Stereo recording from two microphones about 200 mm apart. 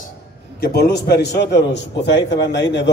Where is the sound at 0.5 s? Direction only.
50° left (ahead or behind).